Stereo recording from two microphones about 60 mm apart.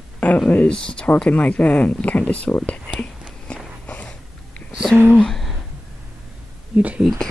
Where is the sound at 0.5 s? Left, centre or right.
Left.